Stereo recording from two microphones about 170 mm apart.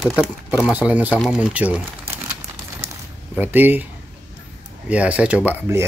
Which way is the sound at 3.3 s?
10° right (ahead or behind).